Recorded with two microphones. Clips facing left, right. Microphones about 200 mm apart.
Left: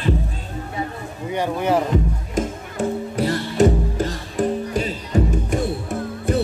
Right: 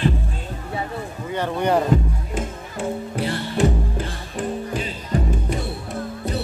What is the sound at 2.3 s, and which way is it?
Music, 40° left (ahead or behind).